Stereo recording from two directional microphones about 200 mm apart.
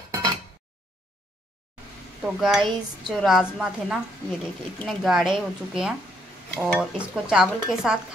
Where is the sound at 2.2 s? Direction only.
Centre (ahead or behind).